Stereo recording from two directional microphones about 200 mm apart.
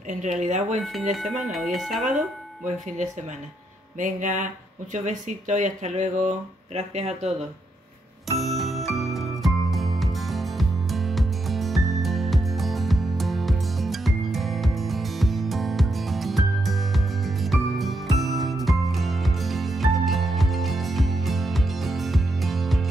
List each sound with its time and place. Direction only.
0.1 s speech: 40° right (ahead or behind)
1.5 s speech: centre (ahead or behind)
4.0 s speech: 40° right (ahead or behind)
8.3 s music: centre (ahead or behind)